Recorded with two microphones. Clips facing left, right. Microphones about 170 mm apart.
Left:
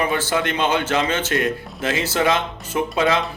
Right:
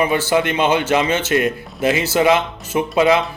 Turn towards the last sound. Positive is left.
turn(degrees=-15)  # may be behind; listen again after turning